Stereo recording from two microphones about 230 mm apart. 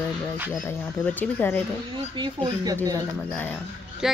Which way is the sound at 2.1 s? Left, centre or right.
Centre.